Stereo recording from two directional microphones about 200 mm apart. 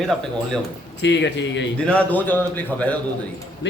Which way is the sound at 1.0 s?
60° left (ahead or behind).